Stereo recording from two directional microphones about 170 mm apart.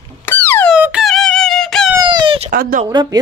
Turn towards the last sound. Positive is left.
turn(degrees=-25)  # may be behind; listen again after turning